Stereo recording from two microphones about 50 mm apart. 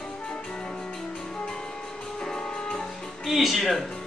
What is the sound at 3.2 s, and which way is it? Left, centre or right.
Speech, centre.